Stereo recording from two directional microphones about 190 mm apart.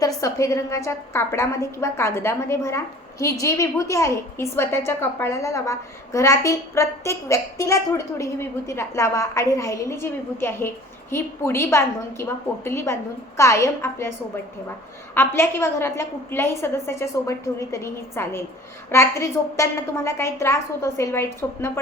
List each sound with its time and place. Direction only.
0.2 s a woman's voice: 15° left (ahead or behind)
15.1 s a woman's voice: 10° left (ahead or behind)